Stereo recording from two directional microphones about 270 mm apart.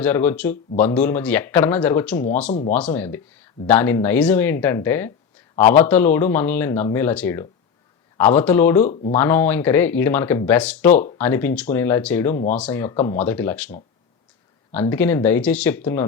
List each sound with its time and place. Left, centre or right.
0.0 s speech: centre
2.5 s speech: left
2.7 s speech: centre
8.8 s speech: left
9.1 s speech: centre